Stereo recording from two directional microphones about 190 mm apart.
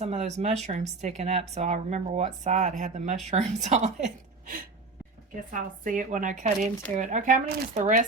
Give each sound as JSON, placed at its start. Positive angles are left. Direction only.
{"t": 0.0, "sound": "a woman's voice", "side_deg": -35}